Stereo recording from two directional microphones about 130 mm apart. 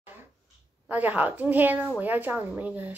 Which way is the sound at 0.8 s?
15° right (ahead or behind).